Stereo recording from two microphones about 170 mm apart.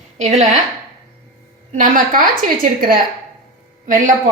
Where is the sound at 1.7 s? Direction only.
50° right (ahead or behind).